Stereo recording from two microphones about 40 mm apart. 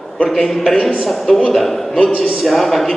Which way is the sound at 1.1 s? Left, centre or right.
Centre.